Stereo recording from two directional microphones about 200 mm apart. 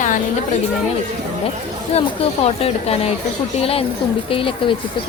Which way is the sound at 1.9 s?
30° left (ahead or behind).